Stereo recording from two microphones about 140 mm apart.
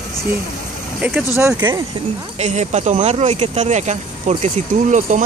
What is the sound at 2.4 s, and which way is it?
Speech, 55° right (ahead or behind).